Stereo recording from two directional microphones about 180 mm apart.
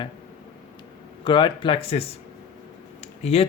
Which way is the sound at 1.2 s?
25° left (ahead or behind).